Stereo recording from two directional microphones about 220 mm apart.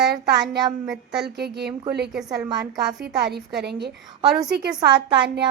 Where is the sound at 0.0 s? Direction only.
45° right (ahead or behind).